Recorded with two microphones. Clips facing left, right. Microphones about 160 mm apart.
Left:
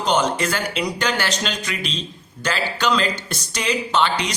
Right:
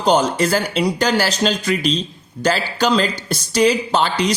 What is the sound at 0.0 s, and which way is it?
Speech, 35° right (ahead or behind).